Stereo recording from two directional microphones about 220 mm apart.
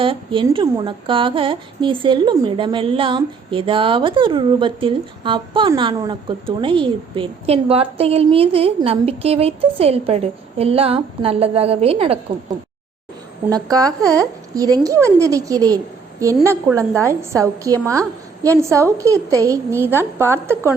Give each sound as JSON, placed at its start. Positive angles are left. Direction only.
{"t": 0.0, "sound": "a woman's voice", "side_deg": -25}
{"t": 13.5, "sound": "a woman's voice", "side_deg": -15}